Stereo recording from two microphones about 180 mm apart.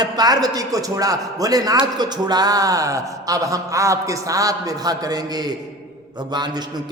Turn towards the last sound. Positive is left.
turn(degrees=-25)  # may be behind; listen again after turning